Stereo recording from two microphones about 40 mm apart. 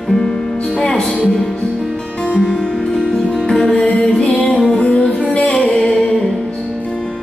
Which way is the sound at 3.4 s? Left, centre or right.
Left.